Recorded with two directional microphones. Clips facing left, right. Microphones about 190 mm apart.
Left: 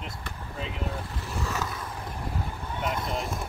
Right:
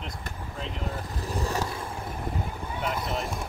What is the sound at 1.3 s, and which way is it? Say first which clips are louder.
Vehicle: right 3 dB; 35° right (ahead or behind).